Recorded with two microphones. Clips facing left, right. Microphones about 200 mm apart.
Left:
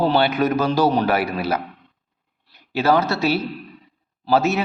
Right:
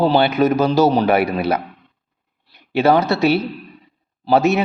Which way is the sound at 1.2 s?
60° right (ahead or behind).